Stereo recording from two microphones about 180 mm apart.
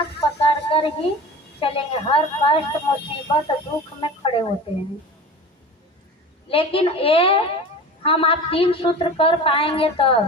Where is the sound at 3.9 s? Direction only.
30° left (ahead or behind).